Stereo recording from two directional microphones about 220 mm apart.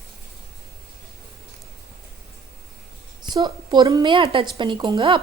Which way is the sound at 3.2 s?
20° right (ahead or behind).